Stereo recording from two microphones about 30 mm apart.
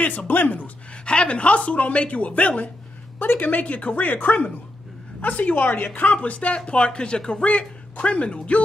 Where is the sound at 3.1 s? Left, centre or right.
Left.